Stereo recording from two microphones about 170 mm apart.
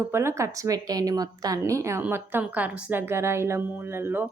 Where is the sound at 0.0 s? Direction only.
15° right (ahead or behind).